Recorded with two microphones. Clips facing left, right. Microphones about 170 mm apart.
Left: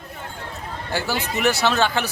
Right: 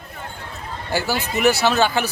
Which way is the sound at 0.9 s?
5° right (ahead or behind).